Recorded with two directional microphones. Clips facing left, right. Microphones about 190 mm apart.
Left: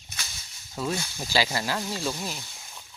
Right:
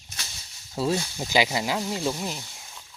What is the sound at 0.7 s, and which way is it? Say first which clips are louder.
Speech: right 5 dB; 30° right (ahead or behind).